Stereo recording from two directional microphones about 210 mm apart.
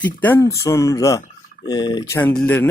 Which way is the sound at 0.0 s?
10° left (ahead or behind).